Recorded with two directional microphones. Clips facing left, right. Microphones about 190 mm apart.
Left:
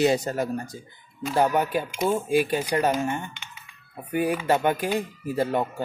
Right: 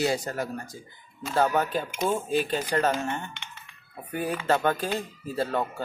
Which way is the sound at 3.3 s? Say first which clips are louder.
Right 1 dB; 5° left (ahead or behind).